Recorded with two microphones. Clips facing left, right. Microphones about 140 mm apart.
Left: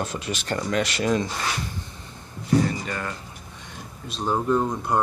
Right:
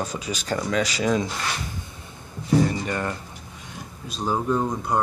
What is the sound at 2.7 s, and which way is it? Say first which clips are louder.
Speech: right 3 dB; 25° right (ahead or behind).